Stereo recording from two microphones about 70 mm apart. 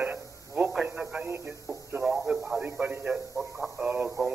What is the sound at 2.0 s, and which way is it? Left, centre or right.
Speech, centre.